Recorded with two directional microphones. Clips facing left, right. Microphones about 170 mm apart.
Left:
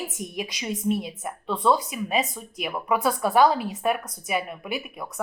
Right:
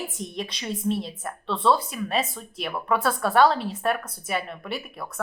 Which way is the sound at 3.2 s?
5° left (ahead or behind).